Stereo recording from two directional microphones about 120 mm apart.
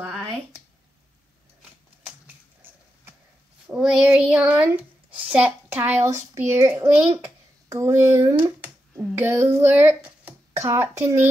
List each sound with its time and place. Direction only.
2.2 s a sound: 15° right (ahead or behind)
3.6 s speech: 5° right (ahead or behind); by 8.5 s 25° right (ahead or behind)
8.5 s finger snapping: 15° right (ahead or behind)
9.1 s speech: 20° right (ahead or behind)